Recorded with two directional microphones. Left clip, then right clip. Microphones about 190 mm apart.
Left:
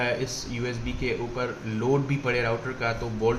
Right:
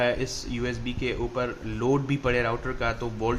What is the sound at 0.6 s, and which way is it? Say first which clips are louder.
Speech: right 1 dB; 55° right (ahead or behind).